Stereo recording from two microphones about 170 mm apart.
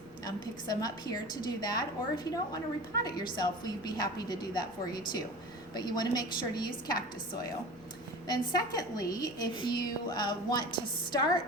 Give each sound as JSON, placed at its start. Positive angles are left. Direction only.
{"t": 0.3, "sound": "a woman's voice", "side_deg": 20}
{"t": 8.3, "sound": "a woman's voice", "side_deg": 25}